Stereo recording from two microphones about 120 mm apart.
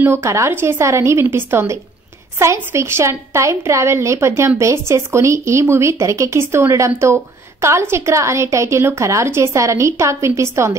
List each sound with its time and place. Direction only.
0.0 s a woman's voice: 20° right (ahead or behind)